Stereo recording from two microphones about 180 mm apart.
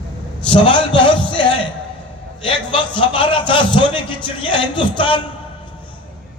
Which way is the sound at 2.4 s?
30° left (ahead or behind).